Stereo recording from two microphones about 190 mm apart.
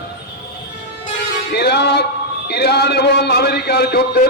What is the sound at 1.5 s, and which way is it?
A man's voice, 60° left (ahead or behind).